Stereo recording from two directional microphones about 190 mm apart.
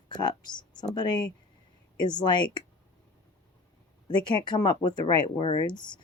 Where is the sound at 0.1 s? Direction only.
25° left (ahead or behind).